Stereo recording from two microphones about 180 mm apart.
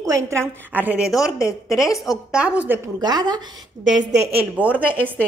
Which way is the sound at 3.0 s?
25° right (ahead or behind).